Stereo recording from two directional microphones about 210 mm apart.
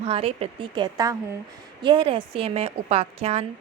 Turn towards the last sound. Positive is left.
turn(degrees=-30)  # may be behind; listen again after turning